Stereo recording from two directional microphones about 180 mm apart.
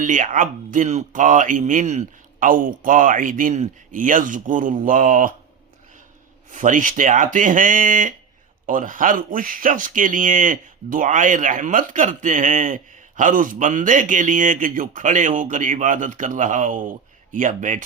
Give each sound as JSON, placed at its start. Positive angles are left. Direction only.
{"t": 0.0, "sound": "speech", "side_deg": -45}
{"t": 6.5, "sound": "speech", "side_deg": -45}